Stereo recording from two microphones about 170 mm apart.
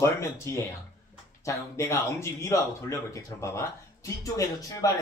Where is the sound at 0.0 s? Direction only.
15° left (ahead or behind).